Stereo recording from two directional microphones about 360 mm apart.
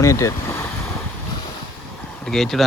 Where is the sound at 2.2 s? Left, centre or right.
Centre.